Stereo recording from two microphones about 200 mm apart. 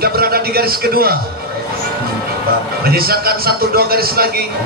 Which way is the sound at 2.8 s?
50° right (ahead or behind).